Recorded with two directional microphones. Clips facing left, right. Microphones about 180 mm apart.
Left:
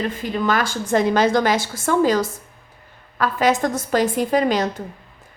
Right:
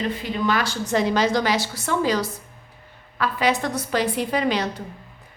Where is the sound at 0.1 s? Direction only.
45° left (ahead or behind).